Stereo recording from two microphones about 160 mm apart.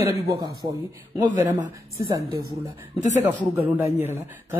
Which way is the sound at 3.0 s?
45° left (ahead or behind).